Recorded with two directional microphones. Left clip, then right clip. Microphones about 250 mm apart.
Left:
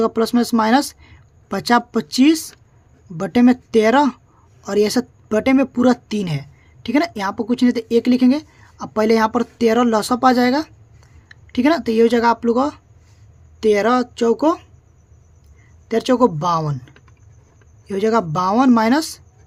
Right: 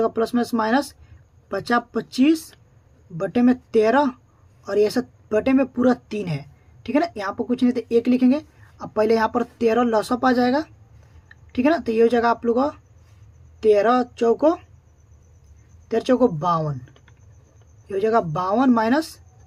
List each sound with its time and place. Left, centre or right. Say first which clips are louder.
0.0 s speech: left 4 dB; left
15.9 s speech: left 3 dB; left